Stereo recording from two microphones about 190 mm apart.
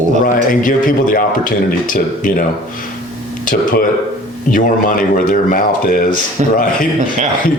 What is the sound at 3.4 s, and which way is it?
A man's voice, 45° left (ahead or behind).